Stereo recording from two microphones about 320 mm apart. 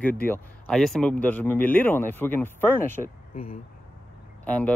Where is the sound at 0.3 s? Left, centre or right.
Centre.